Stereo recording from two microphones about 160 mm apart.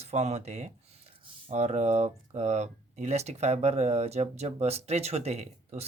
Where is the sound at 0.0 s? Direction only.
40° right (ahead or behind).